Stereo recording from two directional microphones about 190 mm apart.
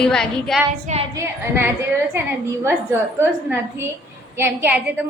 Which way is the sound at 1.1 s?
15° right (ahead or behind).